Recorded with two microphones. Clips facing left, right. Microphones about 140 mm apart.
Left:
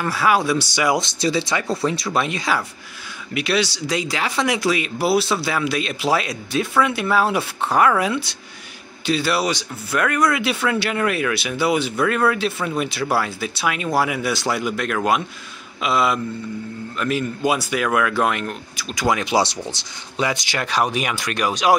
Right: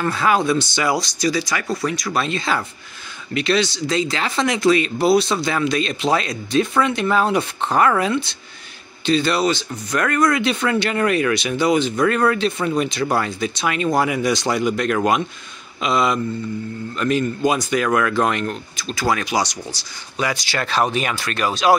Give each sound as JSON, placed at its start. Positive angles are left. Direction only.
{"t": 0.0, "sound": "speech", "side_deg": 10}
{"t": 0.9, "sound": "speech", "side_deg": 25}